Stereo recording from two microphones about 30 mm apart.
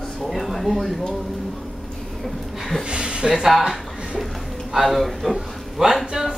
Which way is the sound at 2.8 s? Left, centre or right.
Right.